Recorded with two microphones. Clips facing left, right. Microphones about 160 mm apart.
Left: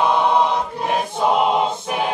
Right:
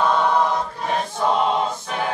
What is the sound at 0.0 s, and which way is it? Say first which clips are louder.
Choir: left 2 dB; 15° left (ahead or behind).